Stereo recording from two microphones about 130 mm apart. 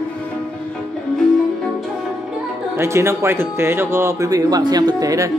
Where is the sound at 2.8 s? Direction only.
20° right (ahead or behind).